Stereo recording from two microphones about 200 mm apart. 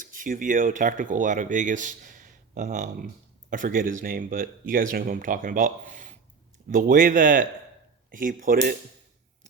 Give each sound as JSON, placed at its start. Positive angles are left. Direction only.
{"t": 0.0, "sound": "speech", "side_deg": -45}